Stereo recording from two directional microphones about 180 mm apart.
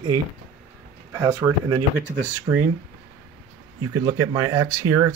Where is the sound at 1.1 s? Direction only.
20° right (ahead or behind).